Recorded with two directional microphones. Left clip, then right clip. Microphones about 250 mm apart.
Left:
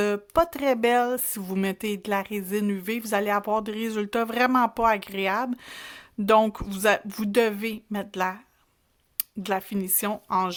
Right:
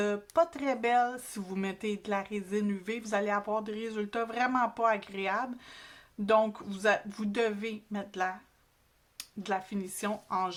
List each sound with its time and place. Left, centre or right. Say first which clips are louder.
0.0 s speech: left 5 dB; left